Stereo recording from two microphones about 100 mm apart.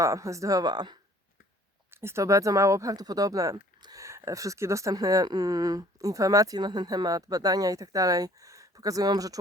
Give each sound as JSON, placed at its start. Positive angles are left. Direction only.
{"t": 0.0, "sound": "a woman's voice", "side_deg": -30}
{"t": 1.9, "sound": "a woman's voice", "side_deg": -25}